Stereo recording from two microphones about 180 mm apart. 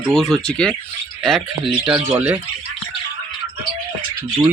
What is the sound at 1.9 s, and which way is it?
Speech, 5° right (ahead or behind).